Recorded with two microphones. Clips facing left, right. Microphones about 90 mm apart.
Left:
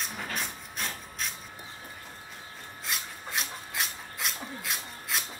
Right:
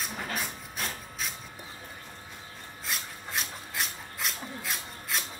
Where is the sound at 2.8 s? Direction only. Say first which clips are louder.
Even; centre (ahead or behind).